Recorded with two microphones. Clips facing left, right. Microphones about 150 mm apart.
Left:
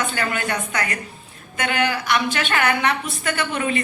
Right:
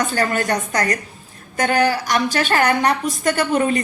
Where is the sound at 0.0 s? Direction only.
40° right (ahead or behind).